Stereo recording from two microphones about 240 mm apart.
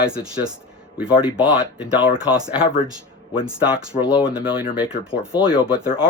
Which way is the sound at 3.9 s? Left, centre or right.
Centre.